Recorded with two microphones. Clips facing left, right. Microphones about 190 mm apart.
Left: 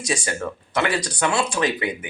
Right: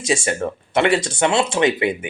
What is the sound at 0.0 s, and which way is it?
Speech, 25° right (ahead or behind).